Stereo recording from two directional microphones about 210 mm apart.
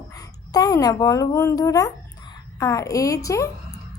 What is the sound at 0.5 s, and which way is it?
A woman's voice, 15° left (ahead or behind).